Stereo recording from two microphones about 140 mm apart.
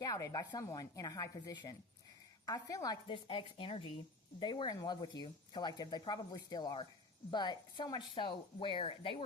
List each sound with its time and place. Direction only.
0.0 s a woman's voice: 25° left (ahead or behind); by 9.2 s 40° left (ahead or behind)